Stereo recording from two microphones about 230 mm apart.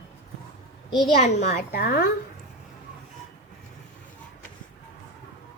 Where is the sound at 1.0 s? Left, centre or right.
Left.